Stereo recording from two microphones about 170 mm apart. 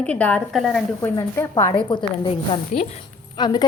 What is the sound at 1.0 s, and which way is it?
Speech, 15° left (ahead or behind).